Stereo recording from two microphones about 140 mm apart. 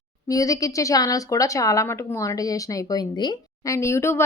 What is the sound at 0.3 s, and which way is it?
A woman's voice, 25° left (ahead or behind).